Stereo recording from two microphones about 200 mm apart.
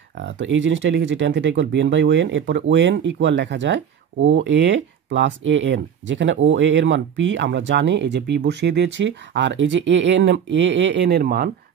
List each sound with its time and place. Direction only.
0.2 s speech: 65° right (ahead or behind)